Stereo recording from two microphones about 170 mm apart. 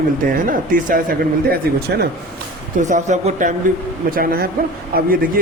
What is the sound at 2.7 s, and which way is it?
Speech, 45° right (ahead or behind).